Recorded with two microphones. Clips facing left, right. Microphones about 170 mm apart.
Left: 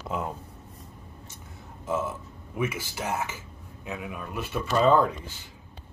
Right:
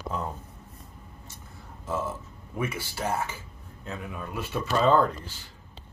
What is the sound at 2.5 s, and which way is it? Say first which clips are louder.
Speech: left 1 dB; 10° left (ahead or behind).